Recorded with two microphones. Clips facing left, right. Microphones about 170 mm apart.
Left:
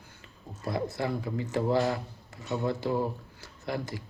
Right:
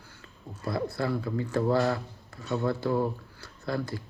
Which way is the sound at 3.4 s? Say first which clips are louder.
Right 2 dB; 20° left (ahead or behind).